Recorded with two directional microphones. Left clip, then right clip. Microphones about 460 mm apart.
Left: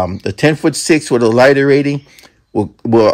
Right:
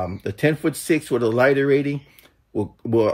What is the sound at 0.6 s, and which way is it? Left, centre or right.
Speech, centre.